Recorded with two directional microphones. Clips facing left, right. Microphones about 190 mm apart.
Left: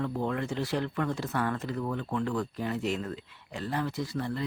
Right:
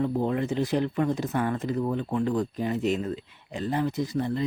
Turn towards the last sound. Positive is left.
turn(degrees=-20)  # may be behind; listen again after turning